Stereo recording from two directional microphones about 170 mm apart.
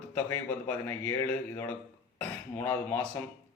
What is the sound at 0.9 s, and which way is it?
Speech, 10° left (ahead or behind).